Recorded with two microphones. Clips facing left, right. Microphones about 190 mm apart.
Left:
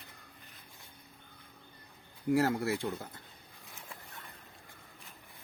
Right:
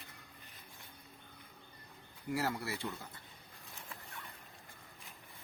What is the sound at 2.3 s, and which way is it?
Speech, 50° left (ahead or behind).